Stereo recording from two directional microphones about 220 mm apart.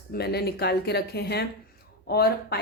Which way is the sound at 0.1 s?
45° left (ahead or behind).